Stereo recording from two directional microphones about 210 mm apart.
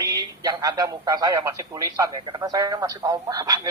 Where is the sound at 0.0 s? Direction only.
15° right (ahead or behind).